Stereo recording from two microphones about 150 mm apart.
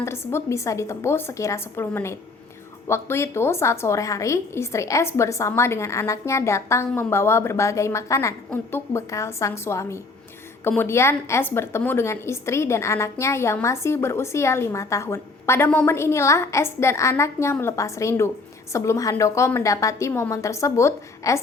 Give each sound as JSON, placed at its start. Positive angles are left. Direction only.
{"t": 0.0, "sound": "a woman's voice", "side_deg": 15}